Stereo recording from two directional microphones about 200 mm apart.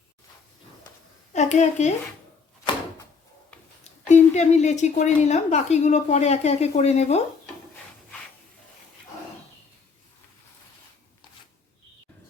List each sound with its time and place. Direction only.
1.3 s speech: 35° left (ahead or behind)
2.7 s a sound: 25° left (ahead or behind)
4.1 s a woman's voice: 35° left (ahead or behind)